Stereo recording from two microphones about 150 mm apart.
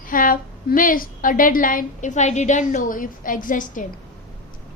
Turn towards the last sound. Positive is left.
turn(degrees=60)  # may be behind; listen again after turning